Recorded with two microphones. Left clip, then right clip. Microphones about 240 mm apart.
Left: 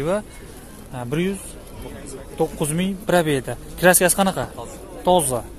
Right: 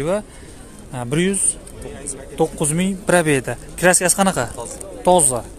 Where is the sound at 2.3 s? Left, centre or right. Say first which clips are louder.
Right 3 dB; centre.